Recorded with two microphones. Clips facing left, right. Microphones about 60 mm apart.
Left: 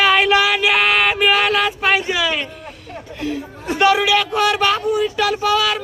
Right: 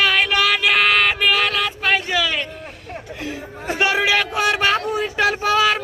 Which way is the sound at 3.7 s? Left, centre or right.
Right.